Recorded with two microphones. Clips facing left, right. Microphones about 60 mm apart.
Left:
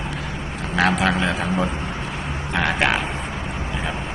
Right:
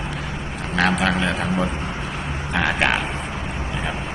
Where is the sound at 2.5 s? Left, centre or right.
Centre.